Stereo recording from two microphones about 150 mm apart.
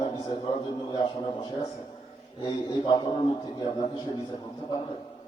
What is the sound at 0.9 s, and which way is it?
A man's voice, 30° left (ahead or behind).